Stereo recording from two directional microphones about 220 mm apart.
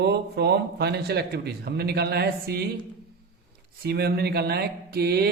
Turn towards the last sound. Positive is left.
turn(degrees=-45)  # may be behind; listen again after turning